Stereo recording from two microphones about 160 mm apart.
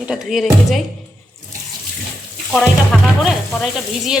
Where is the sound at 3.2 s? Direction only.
Centre (ahead or behind).